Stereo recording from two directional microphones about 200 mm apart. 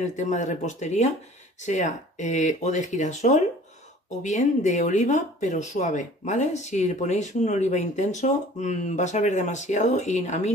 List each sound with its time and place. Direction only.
0.0 s speech: 35° left (ahead or behind)